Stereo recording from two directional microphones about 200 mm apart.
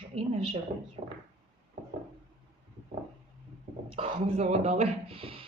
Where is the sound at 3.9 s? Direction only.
30° right (ahead or behind).